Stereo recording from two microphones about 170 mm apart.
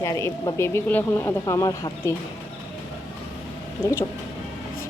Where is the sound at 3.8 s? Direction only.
15° left (ahead or behind).